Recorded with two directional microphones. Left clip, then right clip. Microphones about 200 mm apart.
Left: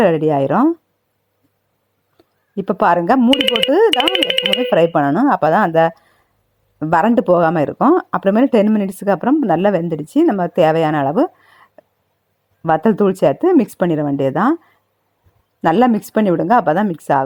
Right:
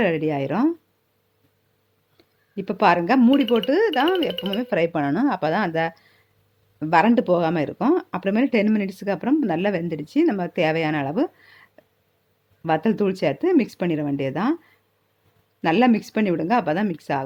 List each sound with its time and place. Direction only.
0.0 s speech: 30° left (ahead or behind)
2.1 s a sound: 30° left (ahead or behind)
3.2 s speech: 15° left (ahead or behind)
4.7 s speech: 25° left (ahead or behind)
12.6 s speech: 25° left (ahead or behind)
15.6 s speech: 30° left (ahead or behind)